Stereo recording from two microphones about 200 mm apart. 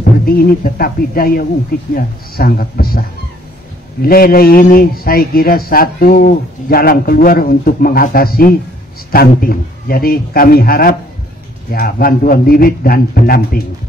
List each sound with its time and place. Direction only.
0.2 s a man's voice: 50° left (ahead or behind)